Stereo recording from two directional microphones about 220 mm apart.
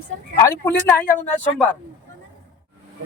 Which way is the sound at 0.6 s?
10° left (ahead or behind).